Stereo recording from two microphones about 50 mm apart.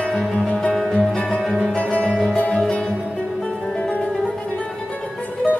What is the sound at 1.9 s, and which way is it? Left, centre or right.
Music, left.